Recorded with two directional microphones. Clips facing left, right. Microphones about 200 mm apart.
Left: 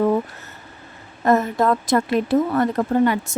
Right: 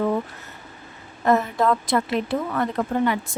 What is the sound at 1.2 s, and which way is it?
A woman's voice, 45° left (ahead or behind).